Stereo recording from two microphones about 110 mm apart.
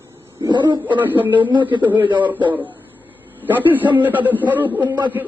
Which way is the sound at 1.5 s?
45° right (ahead or behind).